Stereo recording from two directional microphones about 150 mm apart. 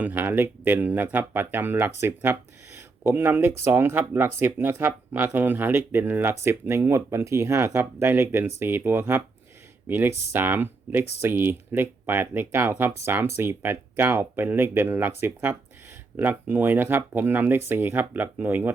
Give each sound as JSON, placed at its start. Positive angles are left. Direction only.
{"t": 0.0, "sound": "speech", "side_deg": -10}